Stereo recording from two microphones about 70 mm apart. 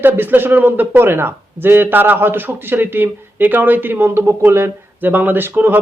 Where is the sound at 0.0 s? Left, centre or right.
Right.